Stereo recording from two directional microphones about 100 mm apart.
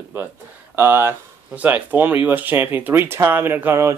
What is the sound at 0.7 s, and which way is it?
Speech, 20° right (ahead or behind).